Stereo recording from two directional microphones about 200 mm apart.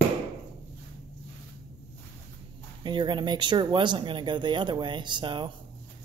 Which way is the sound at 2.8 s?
25° right (ahead or behind).